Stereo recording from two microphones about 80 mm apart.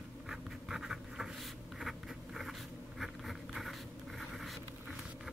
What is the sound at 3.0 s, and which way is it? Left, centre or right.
Insect, centre.